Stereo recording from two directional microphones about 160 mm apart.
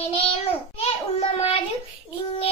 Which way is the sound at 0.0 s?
40° left (ahead or behind).